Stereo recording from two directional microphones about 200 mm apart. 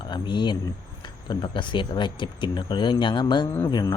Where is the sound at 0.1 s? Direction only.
25° left (ahead or behind).